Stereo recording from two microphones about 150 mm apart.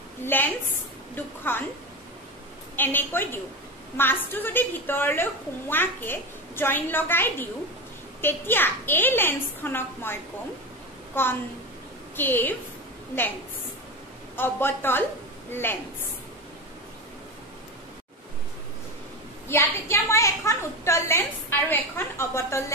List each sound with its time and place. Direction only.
0.2 s a woman's voice: 15° left (ahead or behind)
2.7 s a woman's voice: 15° left (ahead or behind)
11.1 s a woman's voice: 15° left (ahead or behind)
14.3 s a woman's voice: 15° left (ahead or behind)
19.4 s a woman's voice: 15° left (ahead or behind)